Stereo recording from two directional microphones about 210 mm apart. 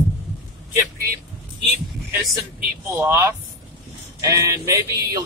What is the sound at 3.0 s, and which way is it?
A man's voice, 10° right (ahead or behind).